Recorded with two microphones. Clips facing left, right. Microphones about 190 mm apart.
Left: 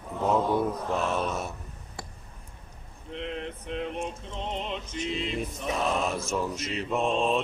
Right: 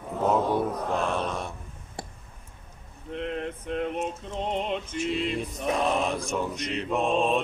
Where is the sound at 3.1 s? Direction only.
50° right (ahead or behind).